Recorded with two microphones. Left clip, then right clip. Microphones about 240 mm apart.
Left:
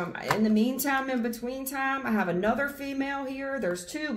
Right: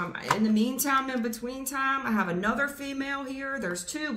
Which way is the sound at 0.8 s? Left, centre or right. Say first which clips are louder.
Right 1 dB; centre.